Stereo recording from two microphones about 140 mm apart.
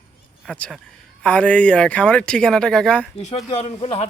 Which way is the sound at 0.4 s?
5° left (ahead or behind).